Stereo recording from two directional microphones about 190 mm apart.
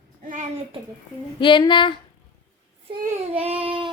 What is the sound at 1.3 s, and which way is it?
Speech, 25° left (ahead or behind).